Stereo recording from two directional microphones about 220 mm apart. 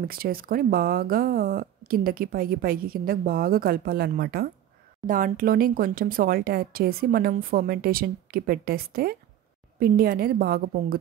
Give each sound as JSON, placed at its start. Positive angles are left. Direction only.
{"t": 0.1, "sound": "speech", "side_deg": -40}